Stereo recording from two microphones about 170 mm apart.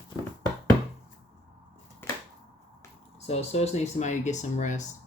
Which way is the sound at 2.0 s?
15° left (ahead or behind).